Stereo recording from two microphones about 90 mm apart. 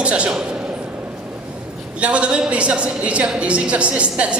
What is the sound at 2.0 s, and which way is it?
A woman's voice, 15° right (ahead or behind).